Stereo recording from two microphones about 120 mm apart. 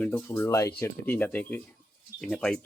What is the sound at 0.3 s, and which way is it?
Speech, 20° left (ahead or behind).